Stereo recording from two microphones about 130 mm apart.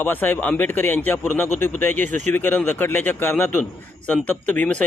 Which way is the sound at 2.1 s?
70° right (ahead or behind).